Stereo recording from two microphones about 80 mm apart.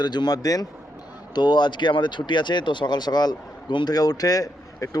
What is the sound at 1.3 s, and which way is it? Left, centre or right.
Speech, left.